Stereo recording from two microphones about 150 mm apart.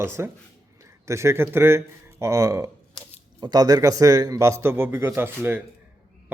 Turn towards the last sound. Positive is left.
turn(degrees=-15)  # may be behind; listen again after turning